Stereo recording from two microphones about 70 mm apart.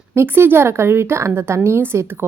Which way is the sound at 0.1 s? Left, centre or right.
Right.